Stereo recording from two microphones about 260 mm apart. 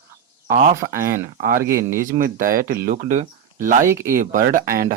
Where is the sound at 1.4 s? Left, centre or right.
Right.